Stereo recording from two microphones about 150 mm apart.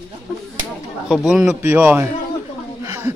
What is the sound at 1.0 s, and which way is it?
A man's voice, 5° right (ahead or behind).